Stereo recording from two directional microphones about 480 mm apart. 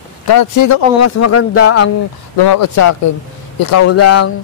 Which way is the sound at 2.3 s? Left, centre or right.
Left.